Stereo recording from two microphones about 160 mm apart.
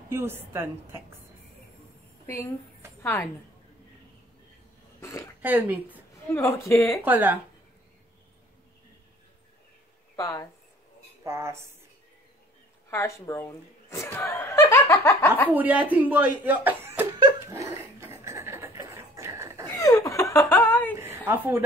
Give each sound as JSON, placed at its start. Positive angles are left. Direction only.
{"t": 0.1, "sound": "speech", "side_deg": -15}
{"t": 3.0, "sound": "a woman's voice", "side_deg": 15}
{"t": 5.0, "sound": "a sound", "side_deg": 20}
{"t": 5.4, "sound": "speech", "side_deg": -10}
{"t": 6.3, "sound": "speech", "side_deg": 20}
{"t": 7.0, "sound": "speech", "side_deg": -10}
{"t": 10.1, "sound": "speech", "side_deg": 20}
{"t": 11.2, "sound": "speech", "side_deg": -15}
{"t": 12.9, "sound": "chuckle", "side_deg": 15}
{"t": 15.5, "sound": "speech", "side_deg": -10}
{"t": 17.2, "sound": "dog", "side_deg": -20}
{"t": 19.7, "sound": "laughter", "side_deg": 20}
{"t": 21.3, "sound": "speech", "side_deg": -10}